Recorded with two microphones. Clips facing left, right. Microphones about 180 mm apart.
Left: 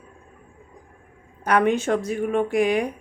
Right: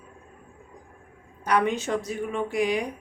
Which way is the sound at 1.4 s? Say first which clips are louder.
Left 4 dB; 55° left (ahead or behind).